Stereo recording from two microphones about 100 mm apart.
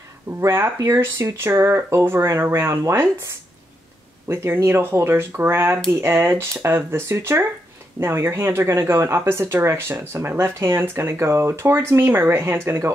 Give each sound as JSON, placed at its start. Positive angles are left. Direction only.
{"t": 0.4, "sound": "speech", "side_deg": -35}